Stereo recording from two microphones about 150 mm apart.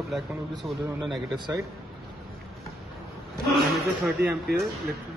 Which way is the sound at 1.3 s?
25° right (ahead or behind).